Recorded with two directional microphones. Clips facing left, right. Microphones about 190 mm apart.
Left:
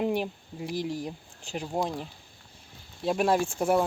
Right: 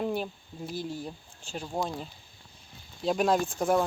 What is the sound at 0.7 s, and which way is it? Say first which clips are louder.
Speech: left 4 dB; 90° left.